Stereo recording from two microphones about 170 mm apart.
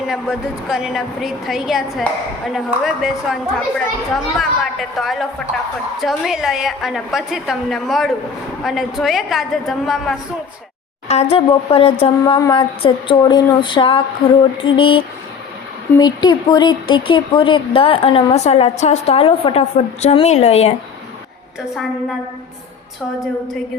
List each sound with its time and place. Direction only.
0.1 s a woman's voice: 5° right (ahead or behind)
11.1 s a woman's voice: 35° left (ahead or behind)
12.4 s a sound: 25° left (ahead or behind)
14.6 s a woman's voice: 30° left (ahead or behind)